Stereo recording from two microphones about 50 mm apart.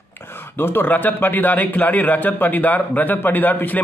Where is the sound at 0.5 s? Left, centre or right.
Left.